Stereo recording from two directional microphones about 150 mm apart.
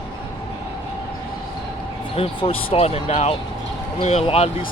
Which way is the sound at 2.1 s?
40° left (ahead or behind).